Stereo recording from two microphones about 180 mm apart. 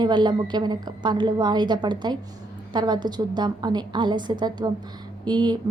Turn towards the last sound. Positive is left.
turn(degrees=-25)  # may be behind; listen again after turning